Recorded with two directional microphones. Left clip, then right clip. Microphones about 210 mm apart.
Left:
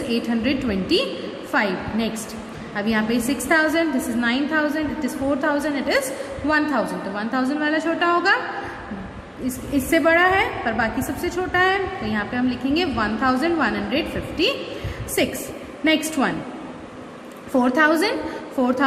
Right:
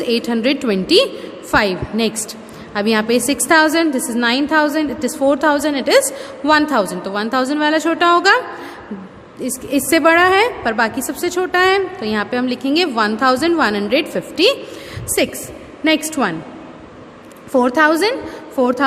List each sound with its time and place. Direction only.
0.1 s a woman's voice: 50° right (ahead or behind)
9.4 s a woman's voice: 50° right (ahead or behind)
17.5 s a woman's voice: 50° right (ahead or behind)